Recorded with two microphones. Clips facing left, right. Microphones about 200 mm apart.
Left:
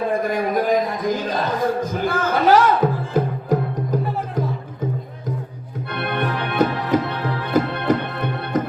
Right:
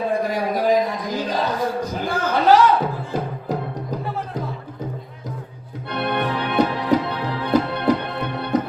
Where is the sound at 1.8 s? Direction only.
50° left (ahead or behind).